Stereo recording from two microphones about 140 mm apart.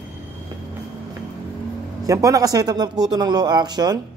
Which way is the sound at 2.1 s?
25° right (ahead or behind).